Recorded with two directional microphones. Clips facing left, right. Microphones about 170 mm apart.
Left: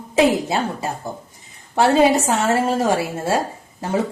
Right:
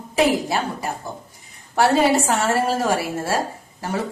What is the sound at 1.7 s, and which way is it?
A woman's voice, 20° left (ahead or behind).